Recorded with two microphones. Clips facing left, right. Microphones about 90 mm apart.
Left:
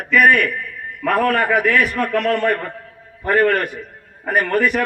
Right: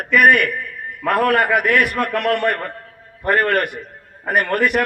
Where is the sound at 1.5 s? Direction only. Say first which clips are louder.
Even; 65° right (ahead or behind).